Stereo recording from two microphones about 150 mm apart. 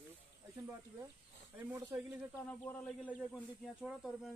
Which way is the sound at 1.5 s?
15° right (ahead or behind).